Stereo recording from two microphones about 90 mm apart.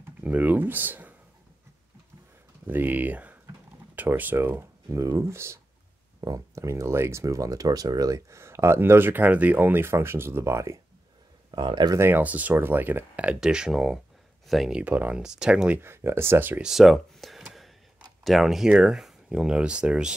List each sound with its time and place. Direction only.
0.0 s speech: 20° right (ahead or behind)
2.6 s speech: 20° right (ahead or behind)
11.5 s speech: 60° right (ahead or behind)
12.0 s speech: 20° right (ahead or behind); by 14.8 s centre (ahead or behind)
14.8 s speech: 15° right (ahead or behind)
15.8 s speech: 25° right (ahead or behind)
16.6 s speech: centre (ahead or behind)